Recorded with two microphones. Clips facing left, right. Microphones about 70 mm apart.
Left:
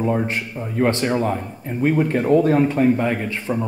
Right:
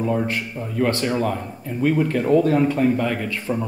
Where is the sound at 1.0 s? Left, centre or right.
Left.